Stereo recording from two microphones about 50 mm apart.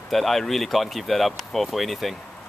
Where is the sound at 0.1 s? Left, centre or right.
Centre.